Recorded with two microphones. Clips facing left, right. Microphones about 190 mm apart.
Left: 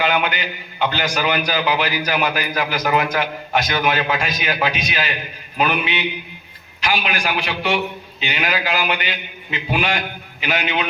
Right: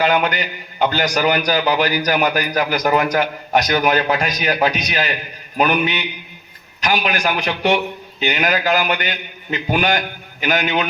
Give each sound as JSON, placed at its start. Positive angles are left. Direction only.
{"t": 0.0, "sound": "a man's voice", "side_deg": -40}